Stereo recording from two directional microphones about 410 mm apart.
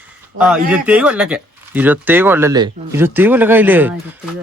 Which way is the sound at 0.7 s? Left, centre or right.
Centre.